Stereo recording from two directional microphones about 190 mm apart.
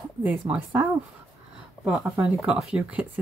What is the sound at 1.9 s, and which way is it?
Speech, 5° right (ahead or behind).